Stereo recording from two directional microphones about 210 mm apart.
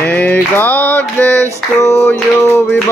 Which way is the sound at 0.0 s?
10° left (ahead or behind).